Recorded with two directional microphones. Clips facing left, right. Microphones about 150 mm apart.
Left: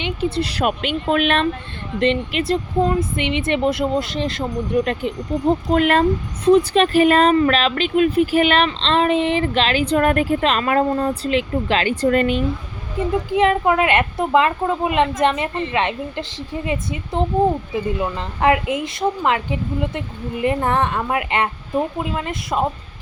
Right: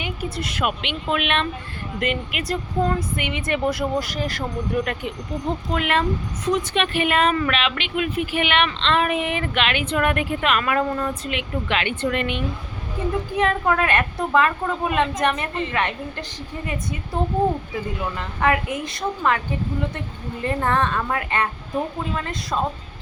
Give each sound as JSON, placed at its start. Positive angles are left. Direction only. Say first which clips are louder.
{"t": 0.0, "sound": "speech", "louder": "left 7 dB", "side_deg": 25}
{"t": 5.7, "sound": "speech", "louder": "left 5 dB", "side_deg": 40}
{"t": 13.3, "sound": "speech", "louder": "left 5 dB", "side_deg": 20}
{"t": 18.2, "sound": "speech", "louder": "left 3 dB", "side_deg": 25}